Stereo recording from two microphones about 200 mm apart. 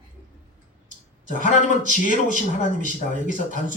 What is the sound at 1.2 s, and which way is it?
Speech, 40° left (ahead or behind).